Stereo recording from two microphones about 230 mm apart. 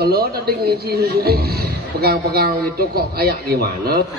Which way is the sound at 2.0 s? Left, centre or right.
Right.